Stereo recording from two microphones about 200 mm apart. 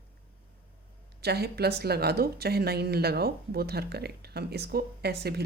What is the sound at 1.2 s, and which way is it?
Speech, 55° right (ahead or behind).